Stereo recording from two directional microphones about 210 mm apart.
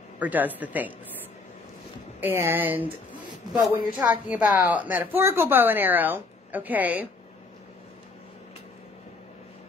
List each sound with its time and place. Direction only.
0.2 s speech: 10° right (ahead or behind)
2.1 s speech: 10° right (ahead or behind)